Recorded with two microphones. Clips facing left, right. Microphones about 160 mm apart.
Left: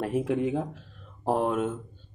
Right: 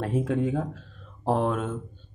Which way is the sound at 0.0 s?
15° left (ahead or behind).